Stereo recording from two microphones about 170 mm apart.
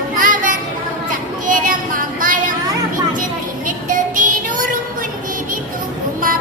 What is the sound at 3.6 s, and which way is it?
Music, 50° right (ahead or behind).